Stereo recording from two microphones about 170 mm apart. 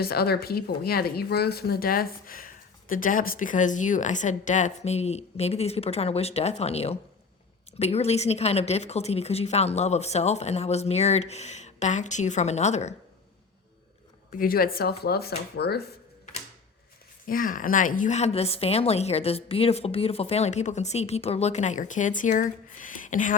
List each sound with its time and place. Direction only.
0.0 s a woman's voice: 65° left (ahead or behind); by 12.9 s 40° left (ahead or behind)
14.3 s speech: 60° left (ahead or behind)
17.2 s a woman's voice: 55° left (ahead or behind)